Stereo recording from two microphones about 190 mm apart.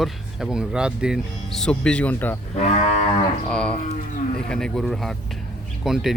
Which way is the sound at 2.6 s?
35° left (ahead or behind).